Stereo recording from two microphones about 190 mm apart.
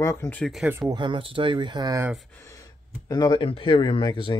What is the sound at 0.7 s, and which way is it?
Speech, 20° right (ahead or behind).